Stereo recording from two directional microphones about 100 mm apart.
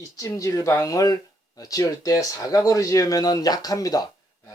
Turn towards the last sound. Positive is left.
turn(degrees=35)  # may be behind; listen again after turning